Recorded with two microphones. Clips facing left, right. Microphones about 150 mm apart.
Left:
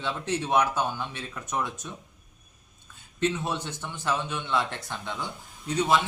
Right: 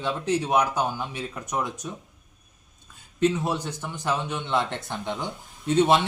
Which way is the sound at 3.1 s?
10° right (ahead or behind).